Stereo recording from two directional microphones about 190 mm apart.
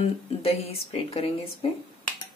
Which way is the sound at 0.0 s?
30° left (ahead or behind).